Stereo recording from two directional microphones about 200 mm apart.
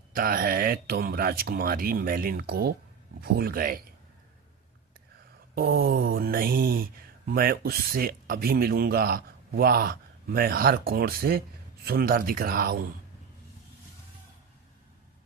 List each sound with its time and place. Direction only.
0.2 s speech: 45° right (ahead or behind)
5.5 s speech: 50° right (ahead or behind)